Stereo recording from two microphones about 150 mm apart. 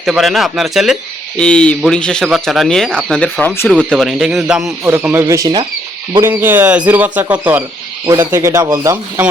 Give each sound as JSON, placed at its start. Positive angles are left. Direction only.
{"t": 0.0, "sound": "speech", "side_deg": 0}
{"t": 3.7, "sound": "speech", "side_deg": 0}
{"t": 8.0, "sound": "speech", "side_deg": -25}